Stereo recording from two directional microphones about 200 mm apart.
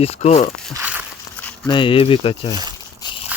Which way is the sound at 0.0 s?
30° left (ahead or behind).